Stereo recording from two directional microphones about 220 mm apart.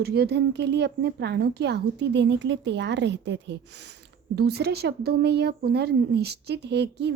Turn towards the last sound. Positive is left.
turn(degrees=-50)  # may be behind; listen again after turning